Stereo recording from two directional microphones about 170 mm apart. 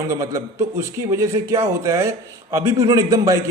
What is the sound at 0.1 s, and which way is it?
A man's voice, 20° right (ahead or behind).